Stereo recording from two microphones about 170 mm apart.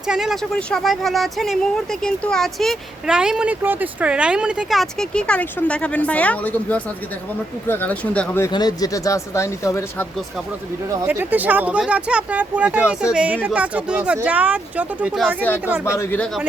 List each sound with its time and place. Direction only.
0.1 s speech: centre (ahead or behind)
8.5 s speech: 20° left (ahead or behind)
11.0 s speech: 10° right (ahead or behind)
16.0 s speech: 5° left (ahead or behind)